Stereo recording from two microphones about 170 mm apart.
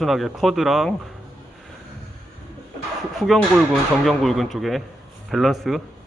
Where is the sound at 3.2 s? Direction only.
Centre (ahead or behind).